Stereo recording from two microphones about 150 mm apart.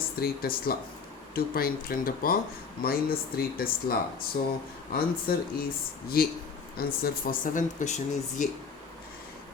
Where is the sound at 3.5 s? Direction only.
80° left.